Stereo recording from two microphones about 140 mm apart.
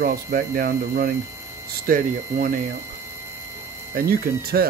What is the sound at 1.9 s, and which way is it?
Speech, 85° right.